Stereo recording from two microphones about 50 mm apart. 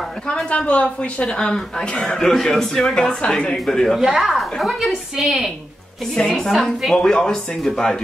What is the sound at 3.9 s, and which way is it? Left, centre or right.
A woman's voice, centre.